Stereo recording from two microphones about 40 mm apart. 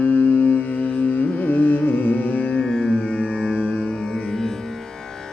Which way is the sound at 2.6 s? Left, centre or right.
Centre.